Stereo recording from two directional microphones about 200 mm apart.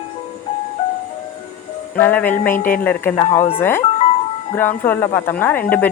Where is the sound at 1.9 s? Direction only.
10° left (ahead or behind).